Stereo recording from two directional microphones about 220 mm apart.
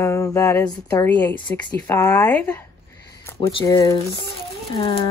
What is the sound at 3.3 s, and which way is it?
Speech, 20° left (ahead or behind).